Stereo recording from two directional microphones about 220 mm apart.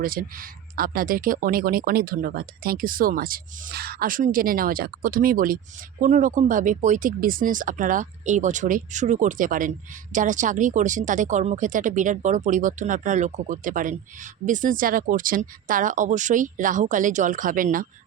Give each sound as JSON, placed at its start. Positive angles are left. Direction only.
{"t": 0.0, "sound": "speech", "side_deg": -40}